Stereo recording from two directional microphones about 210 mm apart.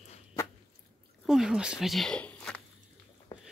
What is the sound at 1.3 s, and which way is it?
Speech, centre (ahead or behind).